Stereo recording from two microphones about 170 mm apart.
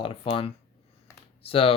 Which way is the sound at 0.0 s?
30° left (ahead or behind).